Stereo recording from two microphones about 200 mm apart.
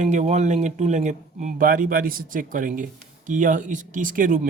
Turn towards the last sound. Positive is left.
turn(degrees=-40)  # may be behind; listen again after turning